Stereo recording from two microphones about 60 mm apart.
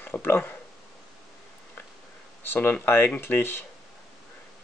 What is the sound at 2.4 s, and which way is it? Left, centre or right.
Speech, left.